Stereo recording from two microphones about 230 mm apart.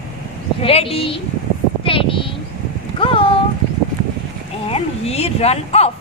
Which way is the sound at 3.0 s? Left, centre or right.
Left.